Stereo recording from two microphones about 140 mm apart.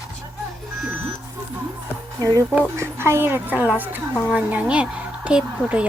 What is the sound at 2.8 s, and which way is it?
A woman's voice, 20° right (ahead or behind).